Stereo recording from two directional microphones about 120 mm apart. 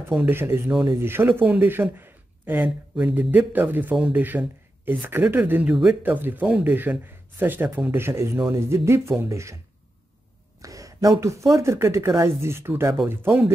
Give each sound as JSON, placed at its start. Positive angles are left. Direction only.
{"t": 0.2, "sound": "a man's voice", "side_deg": -20}
{"t": 10.6, "sound": "a man's voice", "side_deg": -30}